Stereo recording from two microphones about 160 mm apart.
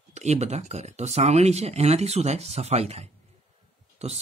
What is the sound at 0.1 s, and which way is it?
Speech, 45° right (ahead or behind).